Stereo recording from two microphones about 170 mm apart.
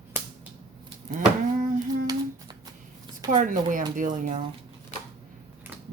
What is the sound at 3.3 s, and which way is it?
Speech, 50° right (ahead or behind).